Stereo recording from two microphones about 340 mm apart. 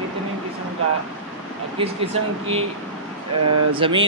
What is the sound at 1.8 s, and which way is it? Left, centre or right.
Speech, centre.